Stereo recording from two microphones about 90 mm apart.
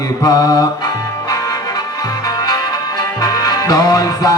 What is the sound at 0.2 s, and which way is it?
Music, 45° left (ahead or behind).